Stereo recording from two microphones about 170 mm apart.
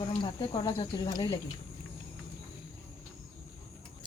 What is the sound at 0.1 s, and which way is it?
Speech, 30° left (ahead or behind).